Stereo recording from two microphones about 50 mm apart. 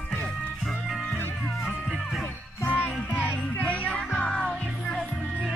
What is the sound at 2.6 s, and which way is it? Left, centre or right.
Music, left.